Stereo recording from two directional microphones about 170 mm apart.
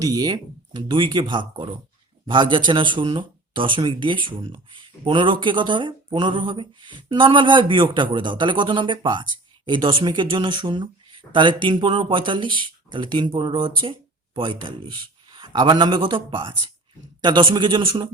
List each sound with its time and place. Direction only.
0.0 s speech: 20° right (ahead or behind)